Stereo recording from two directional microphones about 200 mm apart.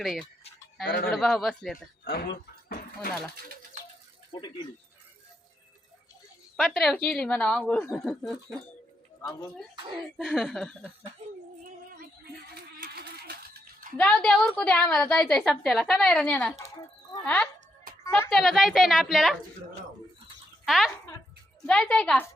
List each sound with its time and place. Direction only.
0.0 s a woman's voice: centre (ahead or behind)
0.9 s speech: 50° left (ahead or behind)
1.1 s a woman's voice: centre (ahead or behind)
1.7 s speech: 50° left (ahead or behind)
4.3 s speech: 20° left (ahead or behind)
6.6 s a woman's voice: centre (ahead or behind)
10.2 s a woman's voice: centre (ahead or behind)
12.8 s a sound: 50° right (ahead or behind)
13.9 s a woman's voice: 5° left (ahead or behind)
18.0 s a sound: 10° left (ahead or behind)
18.3 s a woman's voice: centre (ahead or behind)
20.7 s a woman's voice: centre (ahead or behind)